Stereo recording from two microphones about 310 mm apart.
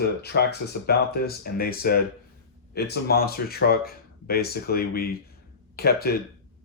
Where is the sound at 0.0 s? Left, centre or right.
Left.